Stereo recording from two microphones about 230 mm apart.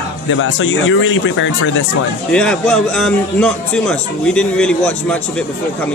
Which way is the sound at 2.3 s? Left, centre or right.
Centre.